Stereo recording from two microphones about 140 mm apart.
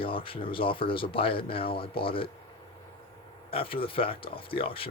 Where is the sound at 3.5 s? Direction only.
40° left (ahead or behind).